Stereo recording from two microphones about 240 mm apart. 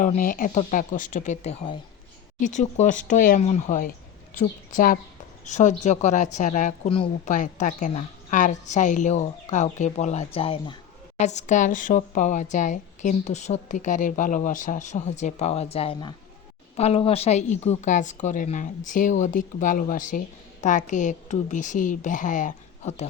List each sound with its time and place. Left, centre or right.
0.0 s a woman's voice: left